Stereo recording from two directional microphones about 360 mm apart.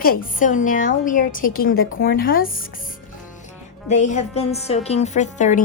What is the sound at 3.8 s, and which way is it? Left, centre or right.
A woman's voice, centre.